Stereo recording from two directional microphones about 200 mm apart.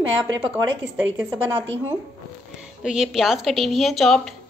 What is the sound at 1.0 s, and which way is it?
Speech, 10° right (ahead or behind).